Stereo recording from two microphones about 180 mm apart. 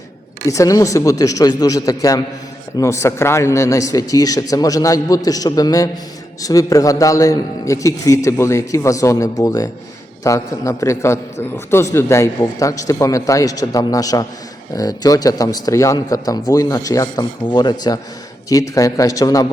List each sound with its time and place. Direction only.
0.4 s a man's voice: 20° left (ahead or behind)